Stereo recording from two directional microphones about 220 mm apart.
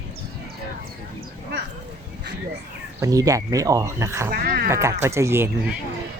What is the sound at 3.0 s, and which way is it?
Speech, 15° right (ahead or behind).